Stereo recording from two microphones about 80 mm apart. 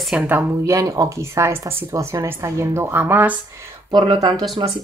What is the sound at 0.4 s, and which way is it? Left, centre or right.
Speech, right.